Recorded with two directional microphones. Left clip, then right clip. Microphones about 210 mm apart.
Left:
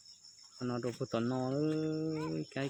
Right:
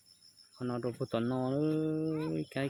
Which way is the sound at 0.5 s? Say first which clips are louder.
Right 1 dB; 10° right (ahead or behind).